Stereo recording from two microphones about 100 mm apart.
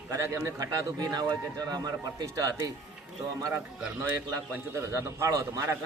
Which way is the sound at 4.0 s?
25° right (ahead or behind).